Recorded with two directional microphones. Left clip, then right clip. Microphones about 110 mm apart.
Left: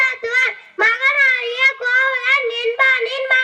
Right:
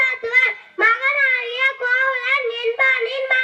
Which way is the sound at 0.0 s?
15° left (ahead or behind).